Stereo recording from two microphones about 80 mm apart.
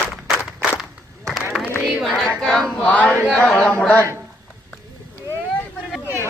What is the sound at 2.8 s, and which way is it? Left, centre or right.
A man's voice, centre.